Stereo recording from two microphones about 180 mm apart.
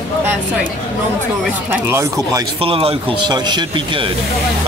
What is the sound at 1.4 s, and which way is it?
Speech, 10° right (ahead or behind).